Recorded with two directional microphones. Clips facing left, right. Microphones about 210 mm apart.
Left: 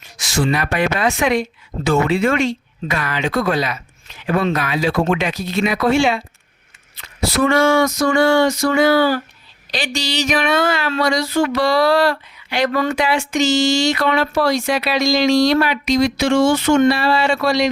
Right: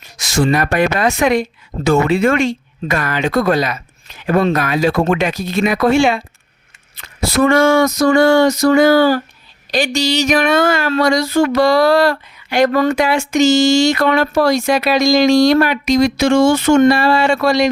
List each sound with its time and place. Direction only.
0.2 s speech: 40° right (ahead or behind)
7.3 s speech: 45° right (ahead or behind)